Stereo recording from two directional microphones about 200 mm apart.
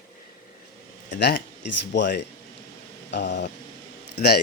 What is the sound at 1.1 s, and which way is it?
Speech, 55° left (ahead or behind).